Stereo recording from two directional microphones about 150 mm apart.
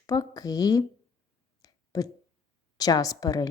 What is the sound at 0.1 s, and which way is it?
Speech, 25° left (ahead or behind).